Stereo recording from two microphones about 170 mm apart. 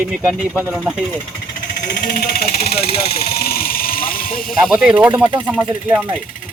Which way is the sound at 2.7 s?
35° left (ahead or behind).